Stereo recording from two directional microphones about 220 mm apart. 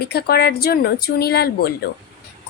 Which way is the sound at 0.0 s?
45° left (ahead or behind).